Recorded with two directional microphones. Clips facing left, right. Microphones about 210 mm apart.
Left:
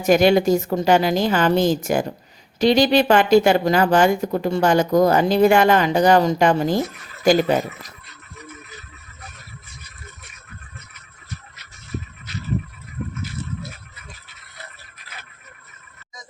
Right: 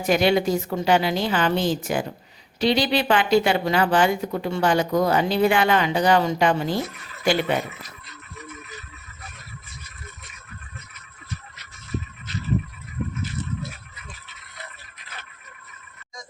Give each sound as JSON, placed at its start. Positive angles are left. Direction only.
{"t": 0.0, "sound": "speech", "side_deg": 45}